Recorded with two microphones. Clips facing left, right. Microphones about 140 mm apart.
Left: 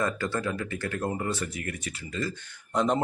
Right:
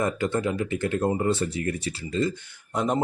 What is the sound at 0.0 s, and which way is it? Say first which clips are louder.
Speech: right 4 dB; 20° right (ahead or behind).